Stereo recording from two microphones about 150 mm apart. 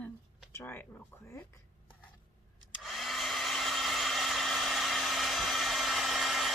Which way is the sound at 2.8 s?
Centre (ahead or behind).